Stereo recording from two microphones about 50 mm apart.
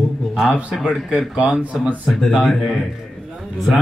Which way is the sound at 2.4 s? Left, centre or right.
Centre.